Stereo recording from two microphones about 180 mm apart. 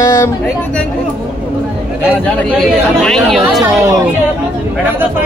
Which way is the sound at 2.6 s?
5° left (ahead or behind).